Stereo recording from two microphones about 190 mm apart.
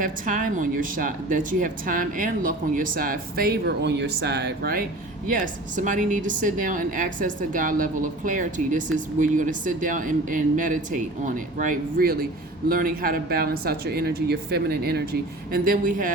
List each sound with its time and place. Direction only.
0.0 s a woman's voice: 45° right (ahead or behind)